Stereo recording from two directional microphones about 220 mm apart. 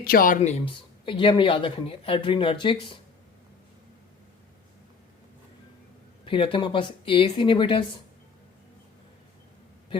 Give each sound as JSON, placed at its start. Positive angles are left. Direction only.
{"t": 0.0, "sound": "speech", "side_deg": 40}
{"t": 6.2, "sound": "speech", "side_deg": 25}